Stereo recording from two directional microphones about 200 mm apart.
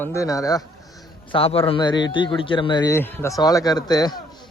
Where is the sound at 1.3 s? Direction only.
30° left (ahead or behind).